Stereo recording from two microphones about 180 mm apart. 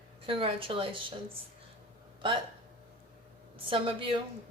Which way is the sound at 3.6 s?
30° right (ahead or behind).